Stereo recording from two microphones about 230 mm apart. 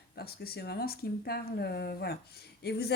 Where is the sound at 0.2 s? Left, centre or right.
Left.